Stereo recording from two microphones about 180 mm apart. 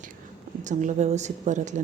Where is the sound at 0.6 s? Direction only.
40° right (ahead or behind).